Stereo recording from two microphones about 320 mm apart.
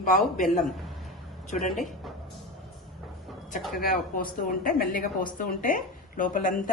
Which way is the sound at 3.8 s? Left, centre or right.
Left.